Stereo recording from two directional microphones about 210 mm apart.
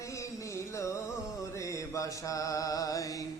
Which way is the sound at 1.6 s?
15° left (ahead or behind).